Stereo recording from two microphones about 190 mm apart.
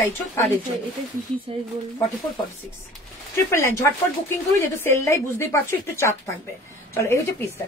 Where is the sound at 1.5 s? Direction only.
30° right (ahead or behind).